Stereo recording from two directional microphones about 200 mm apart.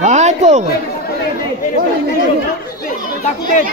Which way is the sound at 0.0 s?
35° right (ahead or behind).